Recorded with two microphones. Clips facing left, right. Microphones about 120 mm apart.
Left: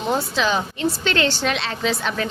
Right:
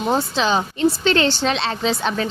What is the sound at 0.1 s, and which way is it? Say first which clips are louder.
A woman's voice: right 2 dB; 30° right (ahead or behind).